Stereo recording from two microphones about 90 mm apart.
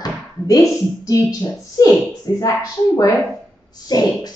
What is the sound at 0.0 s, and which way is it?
A woman's voice, 45° left (ahead or behind).